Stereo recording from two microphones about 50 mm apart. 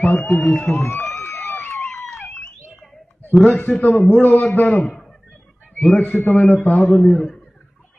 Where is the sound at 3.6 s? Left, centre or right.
Left.